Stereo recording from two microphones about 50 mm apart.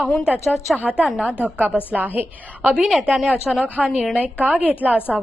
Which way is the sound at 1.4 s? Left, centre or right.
Right.